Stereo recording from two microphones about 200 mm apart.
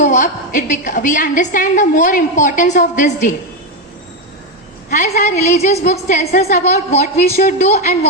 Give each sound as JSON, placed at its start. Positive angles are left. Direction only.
{"t": 0.0, "sound": "a woman's voice", "side_deg": 40}
{"t": 4.9, "sound": "a woman's voice", "side_deg": 45}
{"t": 5.3, "sound": "a woman's voice", "side_deg": 35}